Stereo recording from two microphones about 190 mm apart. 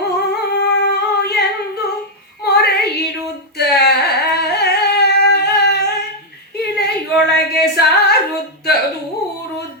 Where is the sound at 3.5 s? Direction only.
60° left (ahead or behind).